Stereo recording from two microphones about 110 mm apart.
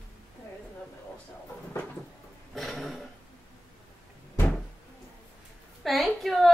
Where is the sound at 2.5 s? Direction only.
Centre (ahead or behind).